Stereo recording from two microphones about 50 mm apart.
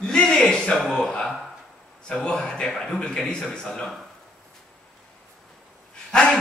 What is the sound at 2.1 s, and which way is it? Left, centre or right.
Speech, centre.